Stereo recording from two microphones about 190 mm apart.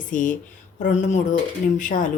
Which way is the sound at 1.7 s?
45° left (ahead or behind).